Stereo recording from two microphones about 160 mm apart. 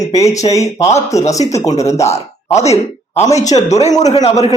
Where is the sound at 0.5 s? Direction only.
20° left (ahead or behind).